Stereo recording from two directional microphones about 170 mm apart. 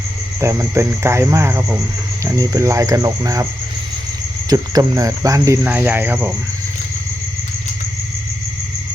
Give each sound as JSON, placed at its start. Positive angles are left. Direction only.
{"t": 0.3, "sound": "cricket", "side_deg": -15}
{"t": 2.2, "sound": "speech", "side_deg": -20}
{"t": 4.4, "sound": "cricket", "side_deg": -20}